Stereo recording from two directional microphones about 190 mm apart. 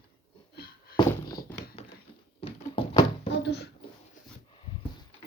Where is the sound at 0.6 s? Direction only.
55° left (ahead or behind).